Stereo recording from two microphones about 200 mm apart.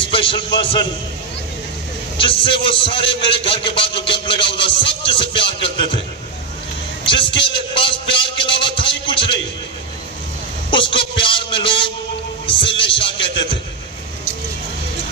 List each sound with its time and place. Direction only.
0.0 s a man's voice: 25° left (ahead or behind)
2.1 s a man's voice: 25° left (ahead or behind)
7.1 s a man's voice: 25° left (ahead or behind)
10.7 s a man's voice: 25° left (ahead or behind)